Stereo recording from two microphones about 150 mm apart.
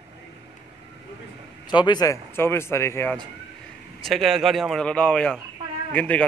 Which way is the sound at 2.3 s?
15° left (ahead or behind).